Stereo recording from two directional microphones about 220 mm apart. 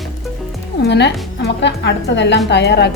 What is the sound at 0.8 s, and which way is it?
A woman's voice, 50° left (ahead or behind).